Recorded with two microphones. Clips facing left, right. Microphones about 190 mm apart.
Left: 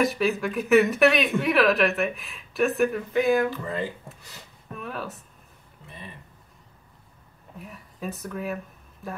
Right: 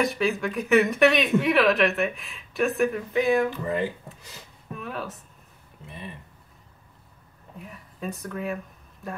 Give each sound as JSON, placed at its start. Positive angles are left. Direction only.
{"t": 0.0, "sound": "speech", "side_deg": 0}
{"t": 3.4, "sound": "speech", "side_deg": -15}
{"t": 4.7, "sound": "speech", "side_deg": 0}
{"t": 7.5, "sound": "speech", "side_deg": 0}